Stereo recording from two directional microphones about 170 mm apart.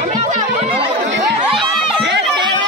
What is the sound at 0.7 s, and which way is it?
Chatter, 90° right.